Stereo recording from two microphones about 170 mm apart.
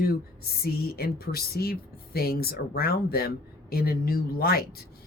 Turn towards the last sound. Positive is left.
turn(degrees=60)  # may be behind; listen again after turning